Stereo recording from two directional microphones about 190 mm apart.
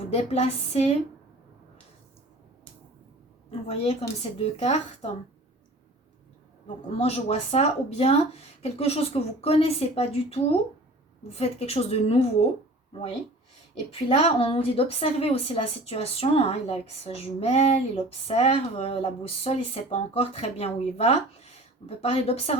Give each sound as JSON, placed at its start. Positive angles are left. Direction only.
{"t": 0.1, "sound": "a woman's voice", "side_deg": 30}
{"t": 4.4, "sound": "a woman's voice", "side_deg": 30}
{"t": 6.9, "sound": "a woman's voice", "side_deg": 30}
{"t": 13.9, "sound": "a woman's voice", "side_deg": 30}